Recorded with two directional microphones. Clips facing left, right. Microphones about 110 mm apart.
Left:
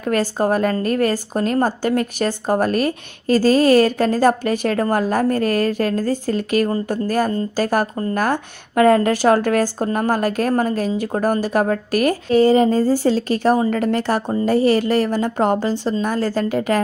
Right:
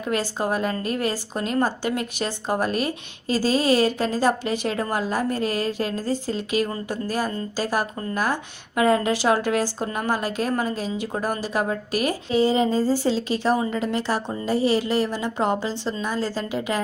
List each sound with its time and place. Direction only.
0.0 s a woman's voice: 45° left (ahead or behind)